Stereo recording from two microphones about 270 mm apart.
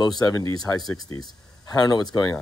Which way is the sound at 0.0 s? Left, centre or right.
Centre.